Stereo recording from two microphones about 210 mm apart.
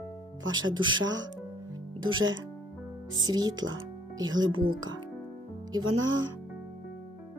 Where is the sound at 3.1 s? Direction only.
20° right (ahead or behind).